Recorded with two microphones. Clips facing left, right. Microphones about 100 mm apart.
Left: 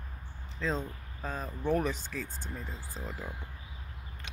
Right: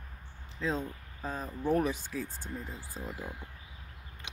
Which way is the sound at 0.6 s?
5° right (ahead or behind).